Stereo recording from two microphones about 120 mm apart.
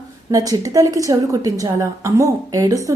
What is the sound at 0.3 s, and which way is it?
A woman's voice, 30° right (ahead or behind).